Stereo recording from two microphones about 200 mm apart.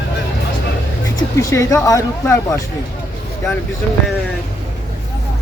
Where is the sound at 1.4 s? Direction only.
15° left (ahead or behind).